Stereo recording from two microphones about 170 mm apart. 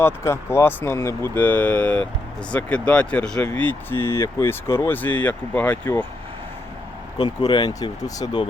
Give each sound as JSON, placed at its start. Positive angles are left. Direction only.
{"t": 0.0, "sound": "speech", "side_deg": 15}
{"t": 7.2, "sound": "speech", "side_deg": 25}